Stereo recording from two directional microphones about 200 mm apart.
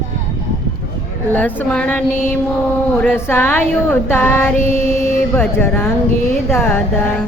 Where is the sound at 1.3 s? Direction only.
10° left (ahead or behind).